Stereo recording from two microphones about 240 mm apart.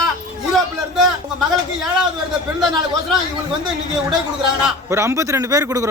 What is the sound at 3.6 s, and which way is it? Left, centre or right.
A man's voice, centre.